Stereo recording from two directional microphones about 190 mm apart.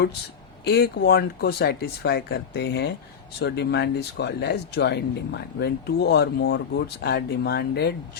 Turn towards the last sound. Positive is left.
turn(degrees=55)  # may be behind; listen again after turning